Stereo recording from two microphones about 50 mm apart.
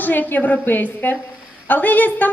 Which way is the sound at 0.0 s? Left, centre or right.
Left.